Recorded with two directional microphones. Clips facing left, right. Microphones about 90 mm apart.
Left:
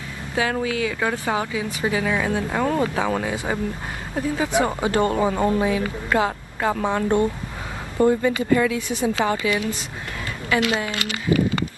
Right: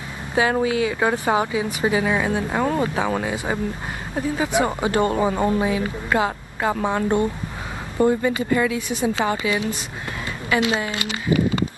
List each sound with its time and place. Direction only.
0.3 s speech: 25° right (ahead or behind)
8.0 s speech: 25° right (ahead or behind)